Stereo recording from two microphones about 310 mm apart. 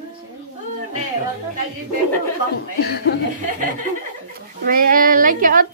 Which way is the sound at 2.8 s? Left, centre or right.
Left.